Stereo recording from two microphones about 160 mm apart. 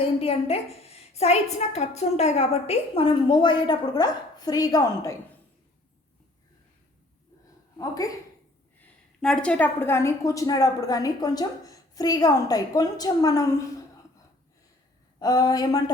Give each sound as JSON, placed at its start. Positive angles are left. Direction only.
{"t": 0.0, "sound": "a woman's voice", "side_deg": 35}
{"t": 7.8, "sound": "a woman's voice", "side_deg": 20}
{"t": 8.8, "sound": "a woman's voice", "side_deg": 5}
{"t": 15.2, "sound": "a woman's voice", "side_deg": 25}